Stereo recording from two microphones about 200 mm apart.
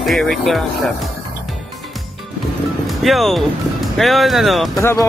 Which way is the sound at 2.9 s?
Centre (ahead or behind).